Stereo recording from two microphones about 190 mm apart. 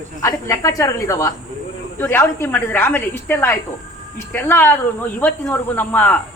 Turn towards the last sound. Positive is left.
turn(degrees=5)  # may be behind; listen again after turning